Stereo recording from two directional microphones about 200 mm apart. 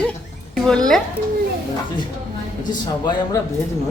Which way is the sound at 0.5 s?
Centre (ahead or behind).